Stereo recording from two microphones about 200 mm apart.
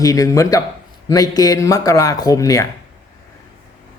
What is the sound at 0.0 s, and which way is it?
A man's voice, 15° left (ahead or behind).